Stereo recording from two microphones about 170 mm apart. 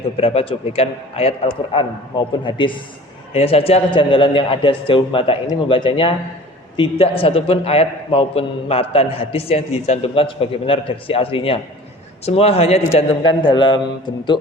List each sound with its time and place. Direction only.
0.2 s a man's voice: 35° left (ahead or behind)